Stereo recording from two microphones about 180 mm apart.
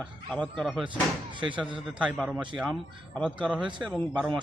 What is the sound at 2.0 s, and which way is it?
Speech, 5° right (ahead or behind).